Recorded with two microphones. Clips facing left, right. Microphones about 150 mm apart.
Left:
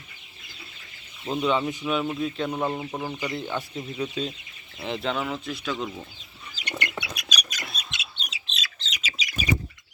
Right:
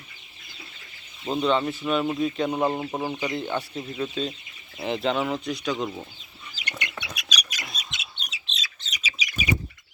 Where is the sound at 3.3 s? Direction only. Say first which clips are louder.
Right 2 dB; centre (ahead or behind).